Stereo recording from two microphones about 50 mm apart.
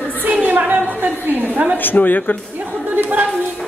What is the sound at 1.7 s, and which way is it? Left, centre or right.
Speech, left.